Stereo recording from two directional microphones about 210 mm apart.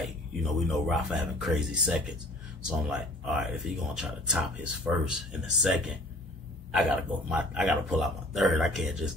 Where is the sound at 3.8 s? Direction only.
5° right (ahead or behind).